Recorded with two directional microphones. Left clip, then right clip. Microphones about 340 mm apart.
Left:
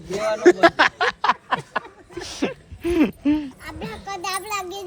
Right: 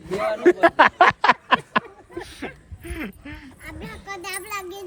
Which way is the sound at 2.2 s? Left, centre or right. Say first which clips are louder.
Left 8 dB; centre.